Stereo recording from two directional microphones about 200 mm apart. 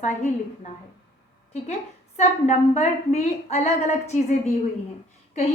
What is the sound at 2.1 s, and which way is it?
A woman's voice, 35° left (ahead or behind).